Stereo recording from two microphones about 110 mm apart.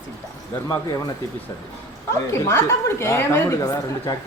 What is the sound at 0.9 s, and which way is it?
Speech, 35° left (ahead or behind).